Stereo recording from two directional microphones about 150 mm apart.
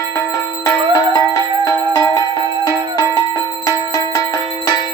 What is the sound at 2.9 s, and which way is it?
Bell, 25° left (ahead or behind).